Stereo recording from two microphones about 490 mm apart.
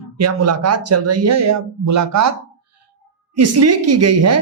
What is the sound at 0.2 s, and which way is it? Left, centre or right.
A woman's voice, right.